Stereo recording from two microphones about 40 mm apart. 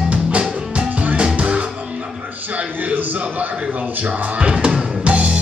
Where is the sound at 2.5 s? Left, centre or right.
Right.